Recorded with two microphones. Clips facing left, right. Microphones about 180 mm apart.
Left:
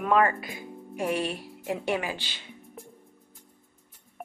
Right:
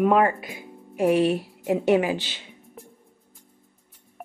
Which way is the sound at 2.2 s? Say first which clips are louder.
Right 1 dB; 10° right (ahead or behind).